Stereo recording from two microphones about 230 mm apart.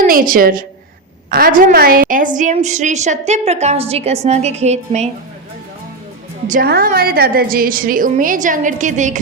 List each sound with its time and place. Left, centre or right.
0.0 s a woman's voice: right
6.5 s a woman's voice: right